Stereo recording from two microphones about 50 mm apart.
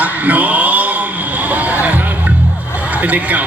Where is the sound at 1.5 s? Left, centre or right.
Right.